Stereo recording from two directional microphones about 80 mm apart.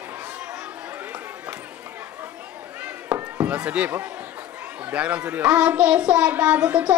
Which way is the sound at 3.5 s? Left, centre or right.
Centre.